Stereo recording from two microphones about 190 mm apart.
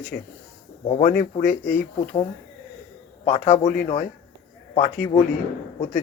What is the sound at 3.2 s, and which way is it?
Speech, 35° left (ahead or behind).